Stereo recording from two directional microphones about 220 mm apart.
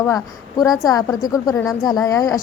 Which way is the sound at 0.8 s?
15° left (ahead or behind).